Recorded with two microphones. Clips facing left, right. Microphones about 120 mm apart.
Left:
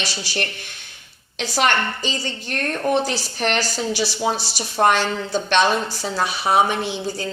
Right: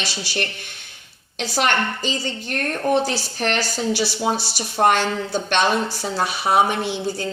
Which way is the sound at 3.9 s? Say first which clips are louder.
Right 1 dB; 50° right (ahead or behind).